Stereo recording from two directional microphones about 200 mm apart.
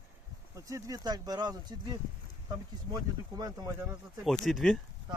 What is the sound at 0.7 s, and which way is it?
Speech, 20° right (ahead or behind).